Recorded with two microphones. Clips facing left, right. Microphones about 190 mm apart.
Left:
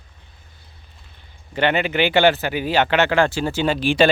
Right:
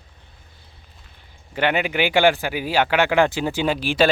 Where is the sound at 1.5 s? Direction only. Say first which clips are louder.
Left 2 dB; 10° right (ahead or behind).